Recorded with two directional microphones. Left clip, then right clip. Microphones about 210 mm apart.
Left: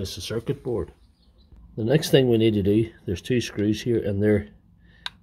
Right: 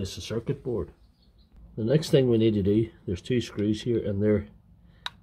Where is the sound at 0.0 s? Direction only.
15° left (ahead or behind).